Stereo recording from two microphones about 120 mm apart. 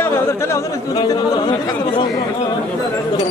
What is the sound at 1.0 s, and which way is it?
Speech, 40° left (ahead or behind).